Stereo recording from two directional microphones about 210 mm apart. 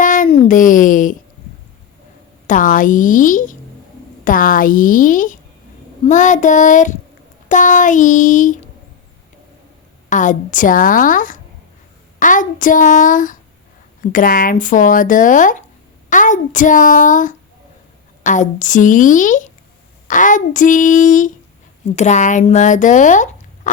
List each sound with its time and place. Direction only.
0.0 s a sound: 40° left (ahead or behind)
2.5 s speech: 40° left (ahead or behind)
10.1 s speech: 35° left (ahead or behind)